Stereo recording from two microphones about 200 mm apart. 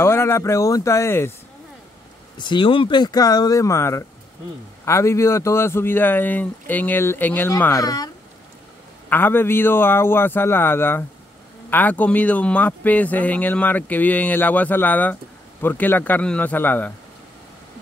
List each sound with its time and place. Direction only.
0.0 s speech: 15° left (ahead or behind)
2.3 s speech: 25° left (ahead or behind)
9.1 s speech: 10° left (ahead or behind)